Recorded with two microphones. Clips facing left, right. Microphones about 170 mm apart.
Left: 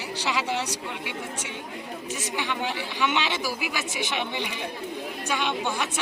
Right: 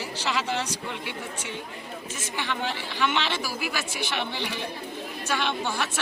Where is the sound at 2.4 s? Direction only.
15° left (ahead or behind).